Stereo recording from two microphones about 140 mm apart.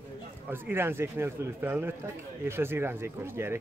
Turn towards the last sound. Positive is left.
turn(degrees=-15)  # may be behind; listen again after turning